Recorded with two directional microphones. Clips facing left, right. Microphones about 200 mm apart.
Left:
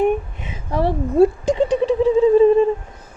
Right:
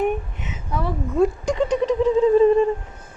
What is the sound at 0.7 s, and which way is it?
Speech, 35° left (ahead or behind).